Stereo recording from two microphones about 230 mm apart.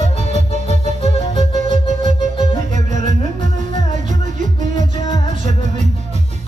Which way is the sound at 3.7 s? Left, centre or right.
Right.